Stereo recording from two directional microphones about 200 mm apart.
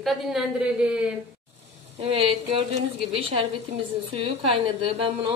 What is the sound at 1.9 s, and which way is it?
Speech, 25° right (ahead or behind).